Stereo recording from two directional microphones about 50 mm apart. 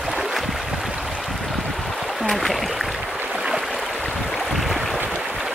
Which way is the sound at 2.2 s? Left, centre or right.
Centre.